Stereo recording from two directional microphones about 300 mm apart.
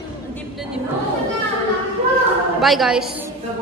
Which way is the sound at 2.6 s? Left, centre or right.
Centre.